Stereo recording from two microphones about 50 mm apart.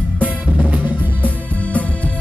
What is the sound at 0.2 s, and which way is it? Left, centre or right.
Music, right.